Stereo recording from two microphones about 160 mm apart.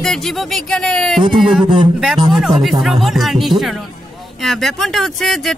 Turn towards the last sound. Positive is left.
turn(degrees=0)  # may be behind; listen again after turning